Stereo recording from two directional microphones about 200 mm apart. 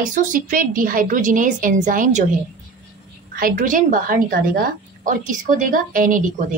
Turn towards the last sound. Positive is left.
turn(degrees=-40)  # may be behind; listen again after turning